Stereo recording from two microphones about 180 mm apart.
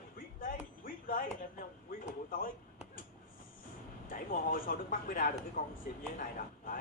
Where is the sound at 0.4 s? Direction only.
50° left (ahead or behind).